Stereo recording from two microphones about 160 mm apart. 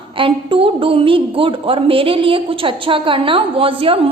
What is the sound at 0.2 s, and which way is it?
A woman's voice, 35° right (ahead or behind).